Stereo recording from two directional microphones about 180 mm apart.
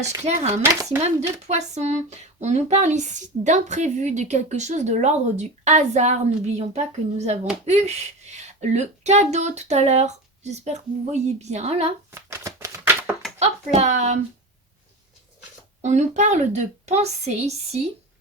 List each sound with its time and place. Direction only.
0.3 s speech: 40° right (ahead or behind)
0.6 s speech: 20° right (ahead or behind)
0.9 s speech: 40° right (ahead or behind)
12.1 s a sound: 15° right (ahead or behind)
13.4 s speech: 40° right (ahead or behind)
15.8 s speech: 40° right (ahead or behind)